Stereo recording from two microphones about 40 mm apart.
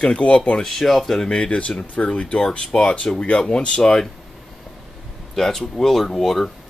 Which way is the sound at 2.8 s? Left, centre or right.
Left.